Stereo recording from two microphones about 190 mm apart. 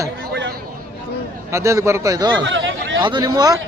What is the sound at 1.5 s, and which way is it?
Speech, 15° right (ahead or behind).